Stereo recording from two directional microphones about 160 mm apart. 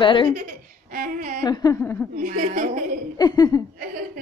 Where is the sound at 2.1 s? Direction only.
55° right (ahead or behind).